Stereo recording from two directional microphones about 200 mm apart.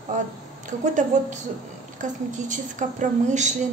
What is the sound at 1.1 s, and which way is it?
A woman's voice, 40° right (ahead or behind).